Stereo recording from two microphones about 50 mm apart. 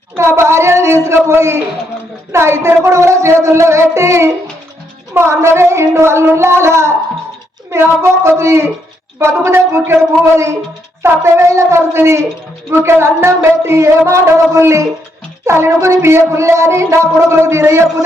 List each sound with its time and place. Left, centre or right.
0.2 s child singing: right
2.3 s music: right
5.1 s child singing: right
14.1 s music: right
15.4 s music: right